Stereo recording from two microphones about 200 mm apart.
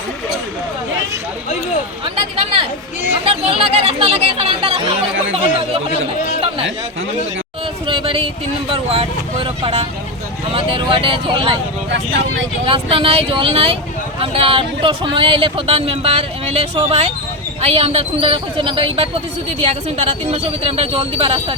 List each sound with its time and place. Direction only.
2.1 s speech: 25° right (ahead or behind)
7.9 s a sound: 25° right (ahead or behind)
8.7 s speech: 30° right (ahead or behind)
11.9 s speech: 70° right (ahead or behind)
12.6 s speech: 25° right (ahead or behind)